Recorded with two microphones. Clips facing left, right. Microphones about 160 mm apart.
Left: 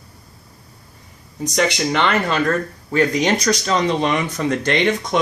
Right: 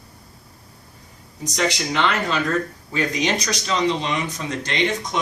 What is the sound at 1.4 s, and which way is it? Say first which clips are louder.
Speech: left 4 dB; 55° left (ahead or behind).